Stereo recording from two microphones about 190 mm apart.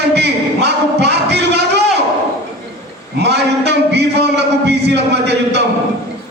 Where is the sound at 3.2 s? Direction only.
60° right (ahead or behind).